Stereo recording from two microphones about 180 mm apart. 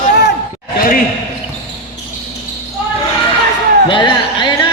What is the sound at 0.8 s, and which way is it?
Basketball bounce, 50° left (ahead or behind).